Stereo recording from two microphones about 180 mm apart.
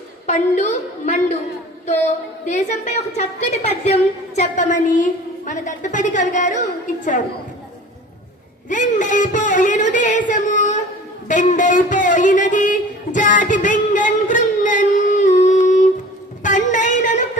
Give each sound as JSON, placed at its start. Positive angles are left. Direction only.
{"t": 0.3, "sound": "a woman's voice", "side_deg": 40}
{"t": 2.5, "sound": "a woman's voice", "side_deg": 40}
{"t": 8.7, "sound": "speech", "side_deg": 45}
{"t": 11.3, "sound": "a sound", "side_deg": 45}